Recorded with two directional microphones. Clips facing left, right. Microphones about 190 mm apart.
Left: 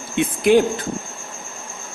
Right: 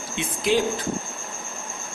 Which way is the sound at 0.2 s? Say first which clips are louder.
Left 8 dB; 55° left (ahead or behind).